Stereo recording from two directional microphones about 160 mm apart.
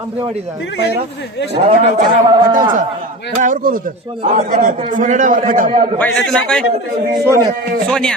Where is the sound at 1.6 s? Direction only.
40° right (ahead or behind).